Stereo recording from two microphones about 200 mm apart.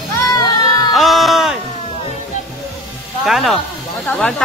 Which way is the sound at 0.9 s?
Centre (ahead or behind).